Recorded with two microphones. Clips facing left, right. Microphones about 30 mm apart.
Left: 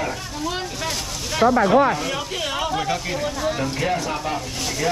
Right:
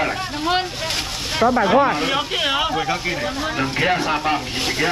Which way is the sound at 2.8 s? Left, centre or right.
Right.